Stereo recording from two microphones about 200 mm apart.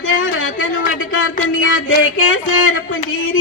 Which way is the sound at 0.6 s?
75° left (ahead or behind).